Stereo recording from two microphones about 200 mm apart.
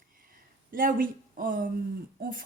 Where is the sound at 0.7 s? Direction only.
45° right (ahead or behind).